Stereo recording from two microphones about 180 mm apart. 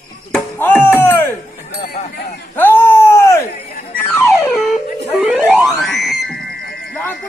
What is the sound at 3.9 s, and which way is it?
Music, 15° left (ahead or behind).